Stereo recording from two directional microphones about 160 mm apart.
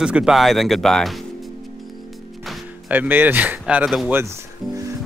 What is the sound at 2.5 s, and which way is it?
Speech, 10° right (ahead or behind).